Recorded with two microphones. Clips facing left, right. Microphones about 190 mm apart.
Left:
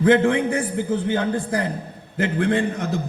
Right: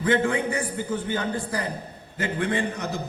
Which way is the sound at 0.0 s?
55° left (ahead or behind).